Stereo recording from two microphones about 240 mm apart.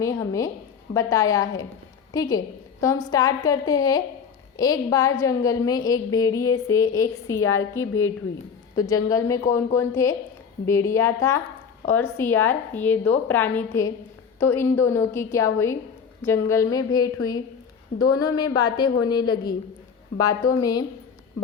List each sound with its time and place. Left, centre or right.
0.0 s a woman's voice: centre